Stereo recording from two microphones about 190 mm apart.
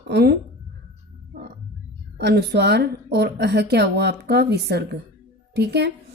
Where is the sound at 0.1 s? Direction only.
60° right (ahead or behind).